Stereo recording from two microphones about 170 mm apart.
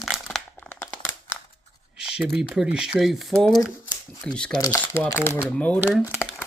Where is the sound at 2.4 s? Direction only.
5° right (ahead or behind).